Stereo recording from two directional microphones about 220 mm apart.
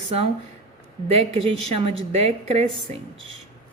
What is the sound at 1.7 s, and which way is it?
Speech, 25° right (ahead or behind).